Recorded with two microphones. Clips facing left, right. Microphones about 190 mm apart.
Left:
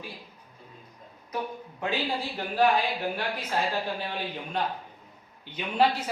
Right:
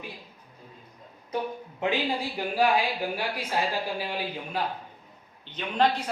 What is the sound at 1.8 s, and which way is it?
Speech, 20° right (ahead or behind).